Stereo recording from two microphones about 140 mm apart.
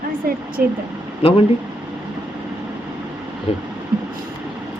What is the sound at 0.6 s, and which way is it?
Speech, 10° right (ahead or behind).